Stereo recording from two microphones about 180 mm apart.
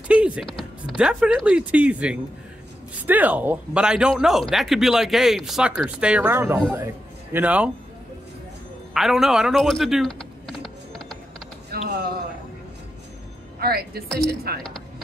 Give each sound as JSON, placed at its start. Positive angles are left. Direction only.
{"t": 0.1, "sound": "music", "side_deg": -5}
{"t": 0.9, "sound": "speech", "side_deg": -5}
{"t": 8.9, "sound": "typing", "side_deg": 0}
{"t": 11.7, "sound": "a sound", "side_deg": -60}
{"t": 13.6, "sound": "speech", "side_deg": -55}
{"t": 14.0, "sound": "speech", "side_deg": 5}